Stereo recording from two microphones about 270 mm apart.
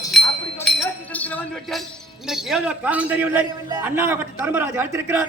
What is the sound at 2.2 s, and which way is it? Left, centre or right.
A man's voice, centre.